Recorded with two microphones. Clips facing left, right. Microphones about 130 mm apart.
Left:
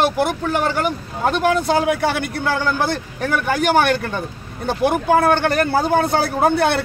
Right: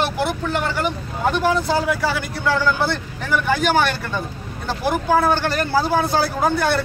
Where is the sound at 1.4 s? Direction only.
60° left (ahead or behind).